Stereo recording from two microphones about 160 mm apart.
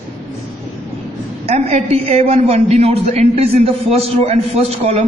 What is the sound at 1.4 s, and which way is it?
A woman's voice, 45° right (ahead or behind).